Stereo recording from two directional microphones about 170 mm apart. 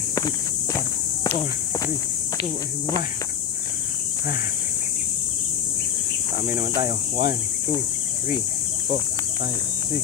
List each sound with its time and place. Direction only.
6.8 s speech: 25° right (ahead or behind)